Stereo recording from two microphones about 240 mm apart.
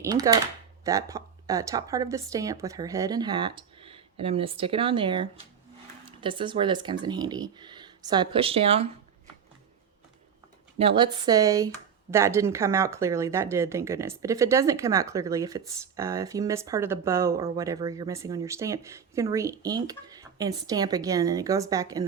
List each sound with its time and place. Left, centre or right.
0.0 s speech: centre
10.8 s speech: right